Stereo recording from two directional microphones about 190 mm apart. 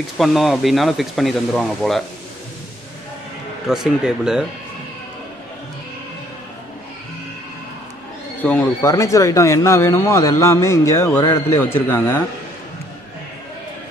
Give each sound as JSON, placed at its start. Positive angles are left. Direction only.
{"t": 0.2, "sound": "speech", "side_deg": 0}
{"t": 3.6, "sound": "speech", "side_deg": 0}
{"t": 8.4, "sound": "speech", "side_deg": 10}